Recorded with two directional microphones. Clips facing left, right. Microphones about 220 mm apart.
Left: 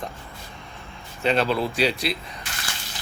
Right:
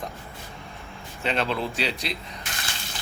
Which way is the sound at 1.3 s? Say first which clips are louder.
Left 5 dB; 40° left (ahead or behind).